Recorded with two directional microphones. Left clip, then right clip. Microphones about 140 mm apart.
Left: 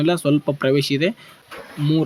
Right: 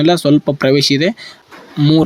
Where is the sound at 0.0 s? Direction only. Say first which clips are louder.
Right 7 dB; 35° right (ahead or behind).